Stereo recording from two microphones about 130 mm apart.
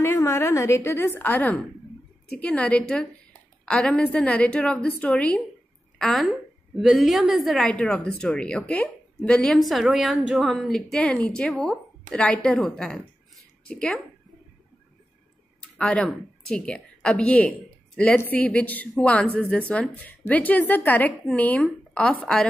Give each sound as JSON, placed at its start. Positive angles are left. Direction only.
{"t": 0.0, "sound": "a woman's voice", "side_deg": 20}
{"t": 15.8, "sound": "a woman's voice", "side_deg": 5}